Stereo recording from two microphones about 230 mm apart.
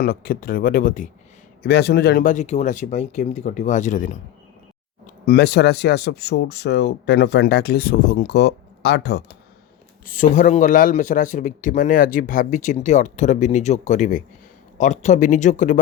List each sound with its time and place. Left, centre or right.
0.0 s speech: left
1.6 s speech: left
5.2 s speech: left
10.1 s speech: left